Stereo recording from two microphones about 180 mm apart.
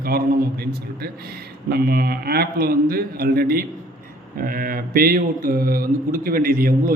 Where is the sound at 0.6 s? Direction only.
60° right (ahead or behind).